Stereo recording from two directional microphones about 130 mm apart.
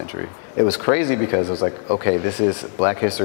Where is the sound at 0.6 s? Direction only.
20° left (ahead or behind).